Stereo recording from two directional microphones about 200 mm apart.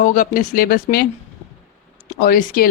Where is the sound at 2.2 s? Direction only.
45° left (ahead or behind).